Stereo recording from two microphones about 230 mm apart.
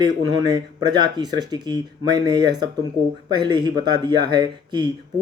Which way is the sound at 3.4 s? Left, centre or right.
Centre.